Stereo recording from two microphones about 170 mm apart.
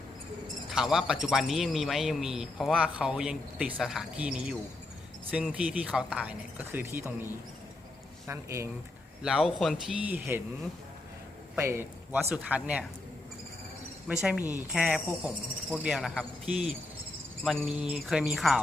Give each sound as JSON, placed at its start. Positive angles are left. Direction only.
{"t": 0.7, "sound": "a man's voice", "side_deg": 0}
{"t": 8.3, "sound": "speech", "side_deg": -15}
{"t": 9.2, "sound": "a man's voice", "side_deg": 0}
{"t": 11.5, "sound": "a man's voice", "side_deg": -15}
{"t": 14.1, "sound": "a man's voice", "side_deg": -5}
{"t": 17.4, "sound": "a man's voice", "side_deg": 5}